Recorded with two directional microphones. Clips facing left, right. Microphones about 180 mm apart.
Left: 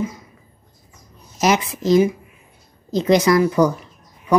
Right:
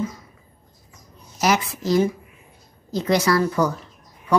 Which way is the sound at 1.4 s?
20° left (ahead or behind).